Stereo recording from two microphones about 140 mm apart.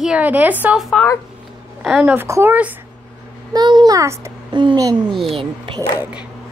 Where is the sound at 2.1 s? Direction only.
20° right (ahead or behind).